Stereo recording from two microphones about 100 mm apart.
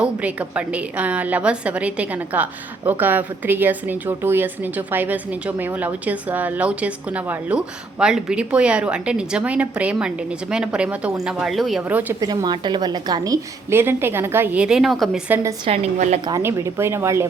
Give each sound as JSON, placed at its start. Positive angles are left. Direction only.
{"t": 0.0, "sound": "a woman's voice", "side_deg": -15}
{"t": 11.9, "sound": "a woman's voice", "side_deg": -15}
{"t": 12.2, "sound": "a woman's voice", "side_deg": -40}
{"t": 14.6, "sound": "a woman's voice", "side_deg": -5}
{"t": 15.6, "sound": "a woman's voice", "side_deg": -90}
{"t": 16.6, "sound": "speech", "side_deg": -30}